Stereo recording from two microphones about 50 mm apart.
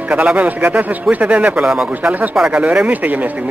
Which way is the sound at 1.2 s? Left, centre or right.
Centre.